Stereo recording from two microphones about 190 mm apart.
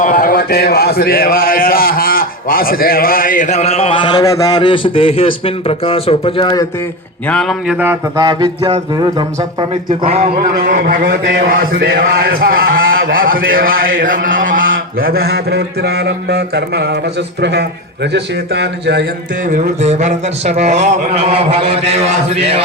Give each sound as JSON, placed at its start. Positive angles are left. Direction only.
{"t": 0.0, "sound": "a man's voice", "side_deg": 45}
{"t": 7.3, "sound": "speech", "side_deg": 0}
{"t": 7.8, "sound": "speech", "side_deg": -10}
{"t": 8.2, "sound": "speech", "side_deg": -25}
{"t": 10.7, "sound": "a sound", "side_deg": -50}
{"t": 13.0, "sound": "a man's voice", "side_deg": -50}
{"t": 14.9, "sound": "a sound", "side_deg": -50}
{"t": 19.8, "sound": "a man's voice", "side_deg": -35}